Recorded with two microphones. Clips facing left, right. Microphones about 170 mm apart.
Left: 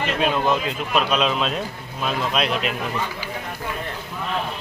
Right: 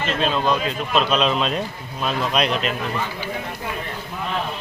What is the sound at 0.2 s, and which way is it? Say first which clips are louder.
Speech: even; 15° left (ahead or behind).